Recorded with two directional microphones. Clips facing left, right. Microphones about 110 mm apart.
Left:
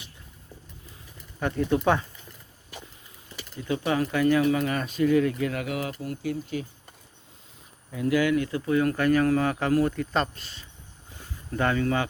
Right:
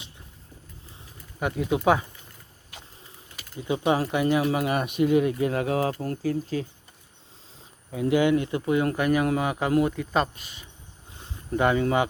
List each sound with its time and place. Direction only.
1.4 s speech: 10° right (ahead or behind)
3.6 s speech: 20° right (ahead or behind)
7.9 s speech: 25° right (ahead or behind)